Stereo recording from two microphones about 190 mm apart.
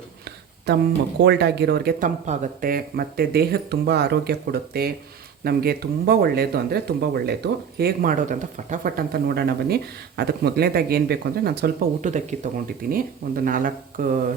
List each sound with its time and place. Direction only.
0.7 s speech: 60° right (ahead or behind)
12.0 s speech: 40° right (ahead or behind)